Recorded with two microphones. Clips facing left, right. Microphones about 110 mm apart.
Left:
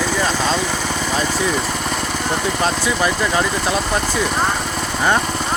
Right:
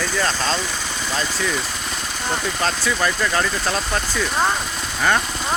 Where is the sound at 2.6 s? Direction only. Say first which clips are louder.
Left 2 dB; 15° left (ahead or behind).